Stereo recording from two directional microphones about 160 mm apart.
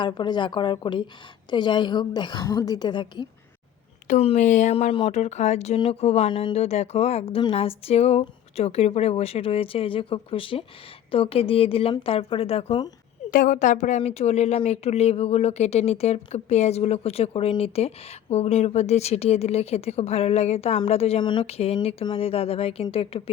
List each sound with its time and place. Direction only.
0.0 s a woman's voice: 30° left (ahead or behind)
4.1 s speech: 40° left (ahead or behind)
13.3 s speech: 55° left (ahead or behind); by 23.3 s 35° left (ahead or behind)